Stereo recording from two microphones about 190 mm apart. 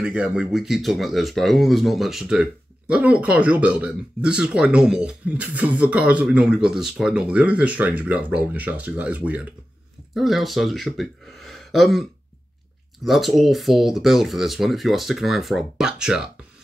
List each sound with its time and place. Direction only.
0.0 s speech: 5° right (ahead or behind)